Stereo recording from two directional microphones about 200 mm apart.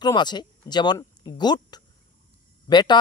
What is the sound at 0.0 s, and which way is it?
Speech, 20° left (ahead or behind).